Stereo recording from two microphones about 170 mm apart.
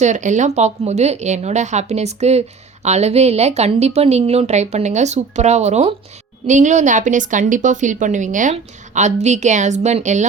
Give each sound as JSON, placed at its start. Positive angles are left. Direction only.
{"t": 0.0, "sound": "a woman's voice", "side_deg": -45}